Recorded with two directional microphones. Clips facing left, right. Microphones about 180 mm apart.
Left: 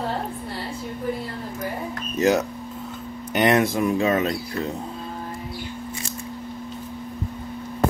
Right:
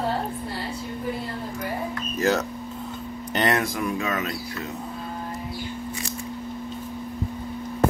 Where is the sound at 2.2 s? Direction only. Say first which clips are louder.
Left 4 dB; 15° left (ahead or behind).